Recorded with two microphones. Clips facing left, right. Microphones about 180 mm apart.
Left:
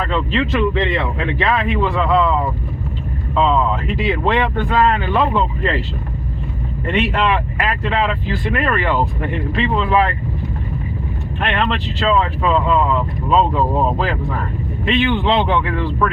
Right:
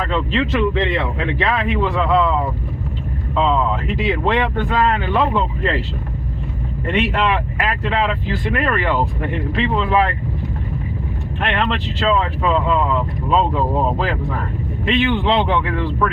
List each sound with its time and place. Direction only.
0.0 s speech: 20° right (ahead or behind)
3.3 s speech: 15° right (ahead or behind)
6.9 s speech: 15° right (ahead or behind)
11.3 s speech: 20° right (ahead or behind)